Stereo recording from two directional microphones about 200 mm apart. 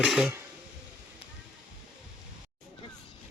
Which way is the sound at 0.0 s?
5° right (ahead or behind).